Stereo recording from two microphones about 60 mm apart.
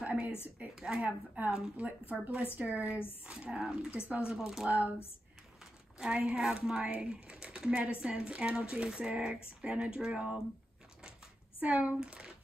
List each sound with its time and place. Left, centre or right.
0.0 s a sound: right
0.7 s speech: centre
1.0 s speech: right; by 4.6 s centre
5.9 s speech: centre
11.6 s speech: right